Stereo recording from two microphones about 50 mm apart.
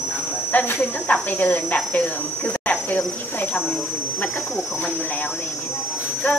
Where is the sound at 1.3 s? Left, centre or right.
Left.